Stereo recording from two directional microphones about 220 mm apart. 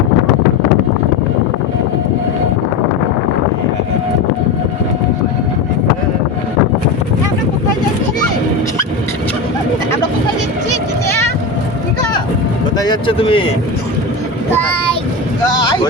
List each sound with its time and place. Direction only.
12.8 s a sound: 20° left (ahead or behind)
14.5 s child singing: 5° left (ahead or behind)
15.5 s boat: 20° left (ahead or behind)